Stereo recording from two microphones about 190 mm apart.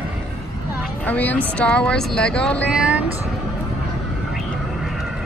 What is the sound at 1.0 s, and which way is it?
Speech, 10° left (ahead or behind).